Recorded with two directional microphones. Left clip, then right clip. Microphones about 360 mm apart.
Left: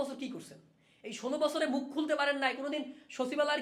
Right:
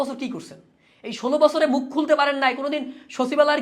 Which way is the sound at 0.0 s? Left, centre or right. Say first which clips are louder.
Right 11 dB; centre.